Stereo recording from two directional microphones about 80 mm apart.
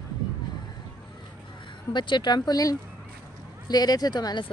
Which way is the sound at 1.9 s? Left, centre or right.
Left.